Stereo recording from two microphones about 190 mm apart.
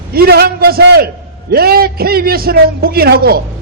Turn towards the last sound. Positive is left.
turn(degrees=-55)  # may be behind; listen again after turning